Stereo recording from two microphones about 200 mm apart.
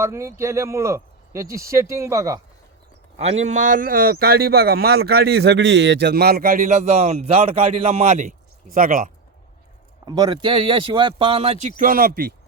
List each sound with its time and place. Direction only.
0.0 s speech: 15° right (ahead or behind)
3.2 s a man's voice: 30° right (ahead or behind)
10.1 s speech: 20° right (ahead or behind)
11.8 s a man's voice: 45° right (ahead or behind)